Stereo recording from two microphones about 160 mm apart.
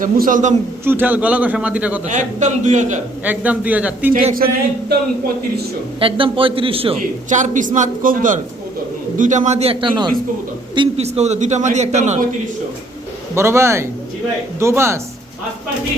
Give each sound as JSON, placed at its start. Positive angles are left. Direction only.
{"t": 0.0, "sound": "speech", "side_deg": -55}
{"t": 0.9, "sound": "a man's voice", "side_deg": -10}
{"t": 2.0, "sound": "a man's voice", "side_deg": -50}
{"t": 3.2, "sound": "a man's voice", "side_deg": -10}
{"t": 4.1, "sound": "speech", "side_deg": -65}
{"t": 6.0, "sound": "a man's voice", "side_deg": -35}
{"t": 7.3, "sound": "a man's voice", "side_deg": -50}
{"t": 13.3, "sound": "a man's voice", "side_deg": -15}